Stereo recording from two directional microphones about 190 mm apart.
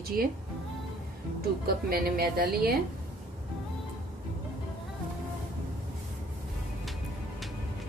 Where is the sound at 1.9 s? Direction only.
50° right (ahead or behind).